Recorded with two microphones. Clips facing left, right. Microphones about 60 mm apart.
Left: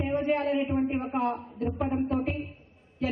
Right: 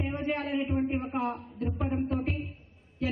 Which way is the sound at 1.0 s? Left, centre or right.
Centre.